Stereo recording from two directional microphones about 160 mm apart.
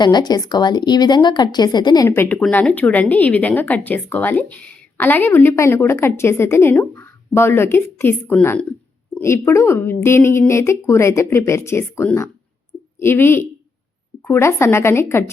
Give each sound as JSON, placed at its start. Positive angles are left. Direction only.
{"t": 0.0, "sound": "a woman's voice", "side_deg": 25}
{"t": 2.0, "sound": "speech", "side_deg": 15}